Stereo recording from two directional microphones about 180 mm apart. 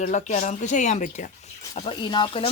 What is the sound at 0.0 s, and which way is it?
Speech, 45° left (ahead or behind).